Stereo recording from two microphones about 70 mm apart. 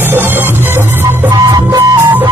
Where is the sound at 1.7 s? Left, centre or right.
Right.